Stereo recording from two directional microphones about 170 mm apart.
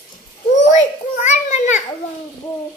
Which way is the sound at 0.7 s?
45° left (ahead or behind).